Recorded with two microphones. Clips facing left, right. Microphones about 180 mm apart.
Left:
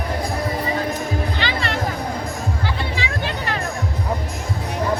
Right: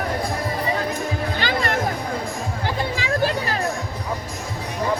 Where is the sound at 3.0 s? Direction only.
40° right (ahead or behind).